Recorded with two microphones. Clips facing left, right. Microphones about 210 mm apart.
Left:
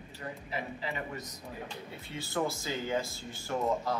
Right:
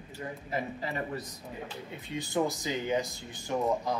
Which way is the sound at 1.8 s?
15° right (ahead or behind).